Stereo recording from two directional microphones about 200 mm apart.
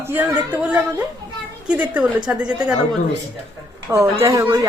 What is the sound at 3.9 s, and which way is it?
Speech, 15° right (ahead or behind).